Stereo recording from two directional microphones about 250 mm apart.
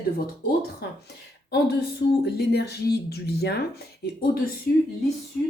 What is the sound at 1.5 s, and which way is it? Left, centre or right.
Speech, left.